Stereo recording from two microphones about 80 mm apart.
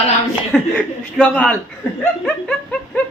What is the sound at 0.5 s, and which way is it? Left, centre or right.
Speech, centre.